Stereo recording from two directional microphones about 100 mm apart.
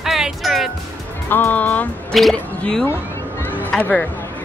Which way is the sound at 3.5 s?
15° left (ahead or behind).